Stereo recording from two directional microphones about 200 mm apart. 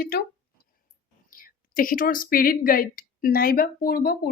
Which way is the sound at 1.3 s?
45° left (ahead or behind).